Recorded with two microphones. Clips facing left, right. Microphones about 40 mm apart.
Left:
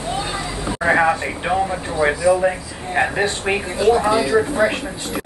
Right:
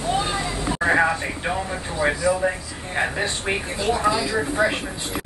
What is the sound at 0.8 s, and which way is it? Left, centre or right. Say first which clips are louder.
Speech: left 4 dB; centre.